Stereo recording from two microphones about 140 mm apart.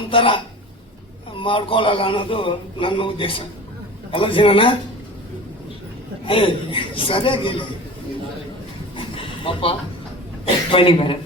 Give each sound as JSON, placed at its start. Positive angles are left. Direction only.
{"t": 0.1, "sound": "a man's voice", "side_deg": 40}
{"t": 6.2, "sound": "a man's voice", "side_deg": 40}
{"t": 9.0, "sound": "a sound", "side_deg": 40}
{"t": 10.7, "sound": "a man's voice", "side_deg": 40}